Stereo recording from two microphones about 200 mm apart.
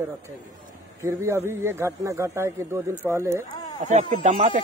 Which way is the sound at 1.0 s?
15° right (ahead or behind).